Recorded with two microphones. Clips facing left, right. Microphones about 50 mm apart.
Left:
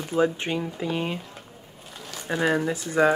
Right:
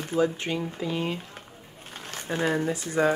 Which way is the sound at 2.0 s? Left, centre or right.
Right.